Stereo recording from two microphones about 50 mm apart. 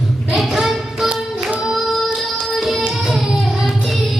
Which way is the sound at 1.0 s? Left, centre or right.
Right.